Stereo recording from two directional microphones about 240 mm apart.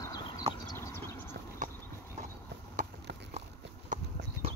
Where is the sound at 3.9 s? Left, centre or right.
Right.